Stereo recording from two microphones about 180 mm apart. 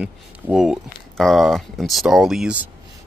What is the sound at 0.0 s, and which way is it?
Speech, 5° right (ahead or behind).